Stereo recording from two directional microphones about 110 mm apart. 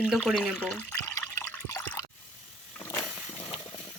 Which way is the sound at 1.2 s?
20° left (ahead or behind).